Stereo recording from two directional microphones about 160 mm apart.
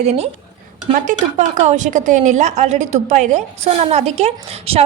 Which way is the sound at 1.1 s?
50° right (ahead or behind).